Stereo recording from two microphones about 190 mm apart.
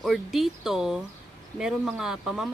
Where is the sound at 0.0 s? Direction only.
Centre (ahead or behind).